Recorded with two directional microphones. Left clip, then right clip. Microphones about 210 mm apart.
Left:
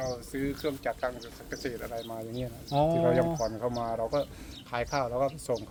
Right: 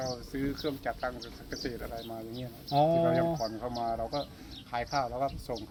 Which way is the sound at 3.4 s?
50° left (ahead or behind).